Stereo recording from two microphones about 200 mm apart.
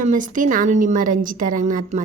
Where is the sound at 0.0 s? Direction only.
40° right (ahead or behind).